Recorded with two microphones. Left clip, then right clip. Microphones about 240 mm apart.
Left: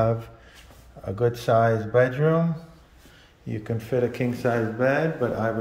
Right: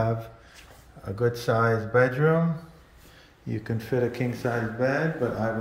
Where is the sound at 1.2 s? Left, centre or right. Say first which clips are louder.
Left 3 dB; centre.